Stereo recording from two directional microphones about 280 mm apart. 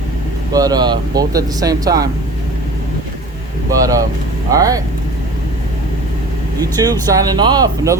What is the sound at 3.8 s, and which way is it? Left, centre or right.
Speech, centre.